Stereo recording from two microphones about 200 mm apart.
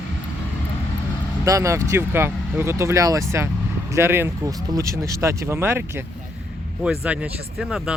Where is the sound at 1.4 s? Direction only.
15° right (ahead or behind).